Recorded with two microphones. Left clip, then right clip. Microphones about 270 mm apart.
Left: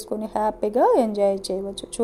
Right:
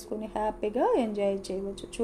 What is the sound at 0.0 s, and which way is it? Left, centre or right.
A woman's voice, left.